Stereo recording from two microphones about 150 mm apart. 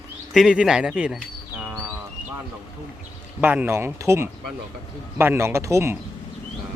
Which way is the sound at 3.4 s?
10° right (ahead or behind).